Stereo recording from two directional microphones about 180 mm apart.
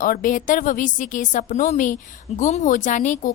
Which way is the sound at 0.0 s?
50° left (ahead or behind).